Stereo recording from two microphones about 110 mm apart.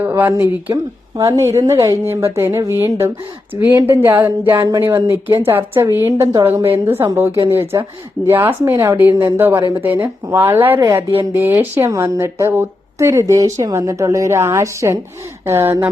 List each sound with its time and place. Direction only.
0.0 s speech: 15° right (ahead or behind)
0.7 s speech: 30° right (ahead or behind)